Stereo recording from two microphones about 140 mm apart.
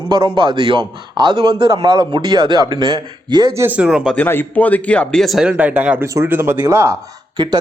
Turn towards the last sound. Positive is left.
turn(degrees=-30)  # may be behind; listen again after turning